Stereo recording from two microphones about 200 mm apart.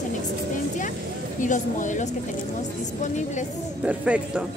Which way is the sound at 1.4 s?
40° left (ahead or behind).